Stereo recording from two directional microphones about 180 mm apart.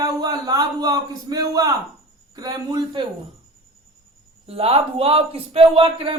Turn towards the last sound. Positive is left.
turn(degrees=-25)  # may be behind; listen again after turning